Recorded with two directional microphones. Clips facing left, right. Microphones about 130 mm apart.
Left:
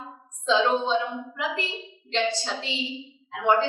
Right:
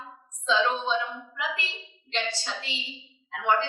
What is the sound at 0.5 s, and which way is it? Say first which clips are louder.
A woman's voice: left 3 dB; 20° left (ahead or behind).